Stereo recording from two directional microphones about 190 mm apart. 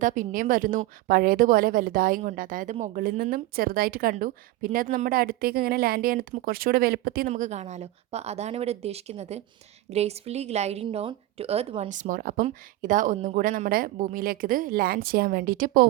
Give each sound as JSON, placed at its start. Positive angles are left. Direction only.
{"t": 0.0, "sound": "a woman's voice", "side_deg": -45}
{"t": 7.3, "sound": "a woman's voice", "side_deg": -40}